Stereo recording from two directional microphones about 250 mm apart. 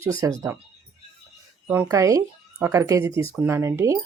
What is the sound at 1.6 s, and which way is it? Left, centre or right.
Speech, centre.